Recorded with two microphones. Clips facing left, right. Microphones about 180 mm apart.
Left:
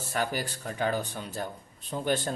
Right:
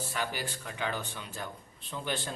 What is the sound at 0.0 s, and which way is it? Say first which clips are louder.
Speech: left 4 dB; 45° left (ahead or behind).